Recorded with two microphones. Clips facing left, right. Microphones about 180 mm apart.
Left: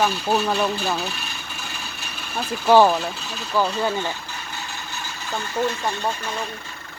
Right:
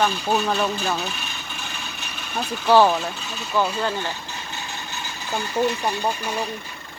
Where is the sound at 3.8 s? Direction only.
10° left (ahead or behind).